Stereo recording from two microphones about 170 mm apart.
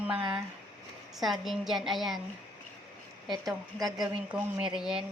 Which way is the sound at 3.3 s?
Centre (ahead or behind).